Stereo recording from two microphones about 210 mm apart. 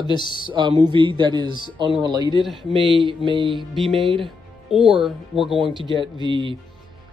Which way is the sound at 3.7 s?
Centre (ahead or behind).